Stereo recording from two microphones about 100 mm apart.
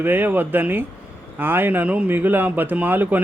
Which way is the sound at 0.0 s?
20° right (ahead or behind).